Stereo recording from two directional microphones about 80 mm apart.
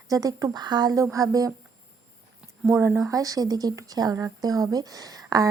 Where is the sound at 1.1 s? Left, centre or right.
Right.